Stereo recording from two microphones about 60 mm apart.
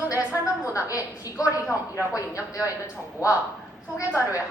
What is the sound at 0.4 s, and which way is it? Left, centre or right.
A woman's voice, left.